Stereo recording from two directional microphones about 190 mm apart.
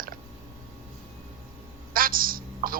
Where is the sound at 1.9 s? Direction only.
50° right (ahead or behind).